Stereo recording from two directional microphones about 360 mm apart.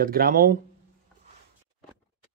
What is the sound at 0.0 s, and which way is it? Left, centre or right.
Speech, right.